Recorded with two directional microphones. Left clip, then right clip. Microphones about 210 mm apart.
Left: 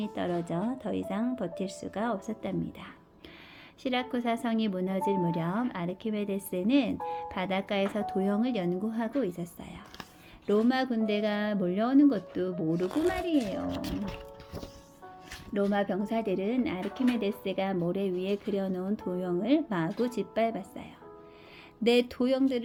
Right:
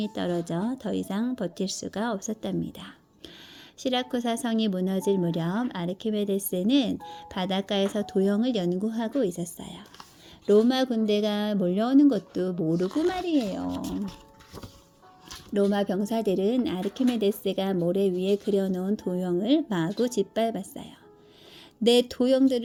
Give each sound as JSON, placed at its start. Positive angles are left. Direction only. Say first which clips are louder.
{"t": 0.0, "sound": "a woman's voice", "louder": "right 3 dB", "side_deg": -50}
{"t": 15.7, "sound": "speech", "louder": "right 2 dB", "side_deg": -45}
{"t": 22.1, "sound": "speech", "louder": "right 5 dB", "side_deg": -45}